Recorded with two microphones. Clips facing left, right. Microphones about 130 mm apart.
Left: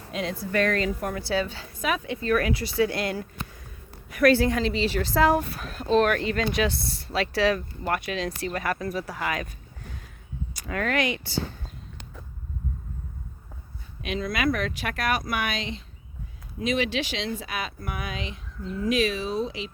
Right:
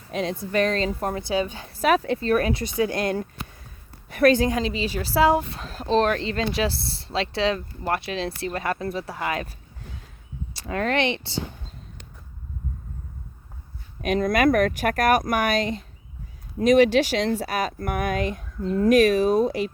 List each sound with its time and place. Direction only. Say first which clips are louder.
0.2 s speech: right 2 dB; 20° right (ahead or behind)
1.2 s a woman's voice: right 2 dB; 15° right (ahead or behind)
1.8 s speech: right 7 dB; 35° right (ahead or behind)
4.3 s a woman's voice: even; 15° right (ahead or behind)
5.5 s speech: even; 25° right (ahead or behind)
10.5 s speech: right 3 dB; 30° right (ahead or behind)
14.0 s speech: right 7 dB; 45° right (ahead or behind)